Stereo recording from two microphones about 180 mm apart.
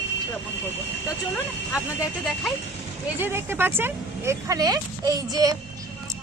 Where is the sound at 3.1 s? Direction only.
10° right (ahead or behind).